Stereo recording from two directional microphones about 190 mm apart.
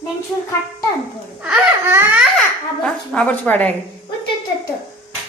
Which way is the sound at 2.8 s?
5° left (ahead or behind).